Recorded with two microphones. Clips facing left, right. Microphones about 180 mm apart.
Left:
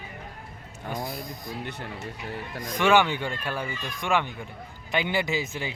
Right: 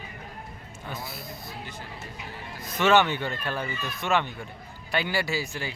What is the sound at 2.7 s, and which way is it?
Speech, 15° left (ahead or behind).